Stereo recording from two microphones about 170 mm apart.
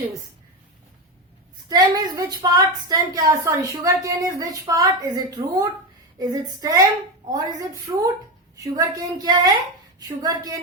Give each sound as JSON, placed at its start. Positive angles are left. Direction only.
{"t": 1.7, "sound": "a woman's voice", "side_deg": -25}